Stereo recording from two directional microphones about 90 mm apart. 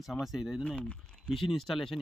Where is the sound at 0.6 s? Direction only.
15° left (ahead or behind).